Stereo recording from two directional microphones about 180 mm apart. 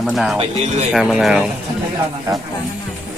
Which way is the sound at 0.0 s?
Centre (ahead or behind).